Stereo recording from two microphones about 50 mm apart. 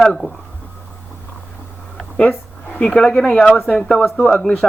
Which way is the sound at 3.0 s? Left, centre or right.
Centre.